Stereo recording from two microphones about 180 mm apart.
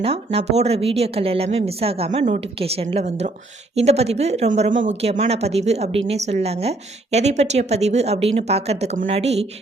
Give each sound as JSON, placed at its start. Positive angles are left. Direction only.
{"t": 0.0, "sound": "a woman's voice", "side_deg": -35}